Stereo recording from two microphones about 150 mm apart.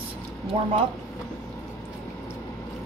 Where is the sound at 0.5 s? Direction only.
45° right (ahead or behind).